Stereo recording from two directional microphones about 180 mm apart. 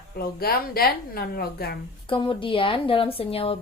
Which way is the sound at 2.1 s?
30° left (ahead or behind).